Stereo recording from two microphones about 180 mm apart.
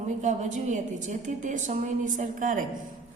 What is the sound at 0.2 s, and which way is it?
A woman's voice, 40° right (ahead or behind).